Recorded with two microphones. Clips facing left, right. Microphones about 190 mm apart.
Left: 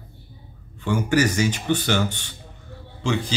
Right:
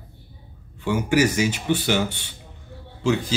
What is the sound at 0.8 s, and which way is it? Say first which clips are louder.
Speech: right 1 dB; 5° right (ahead or behind).